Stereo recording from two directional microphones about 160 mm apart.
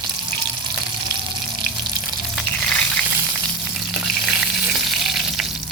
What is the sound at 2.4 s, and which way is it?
Frying, 5° left (ahead or behind).